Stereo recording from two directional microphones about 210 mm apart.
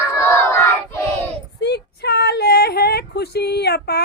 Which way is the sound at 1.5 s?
50° left (ahead or behind).